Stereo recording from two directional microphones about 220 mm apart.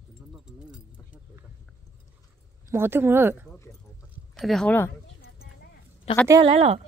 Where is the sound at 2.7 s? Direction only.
10° right (ahead or behind).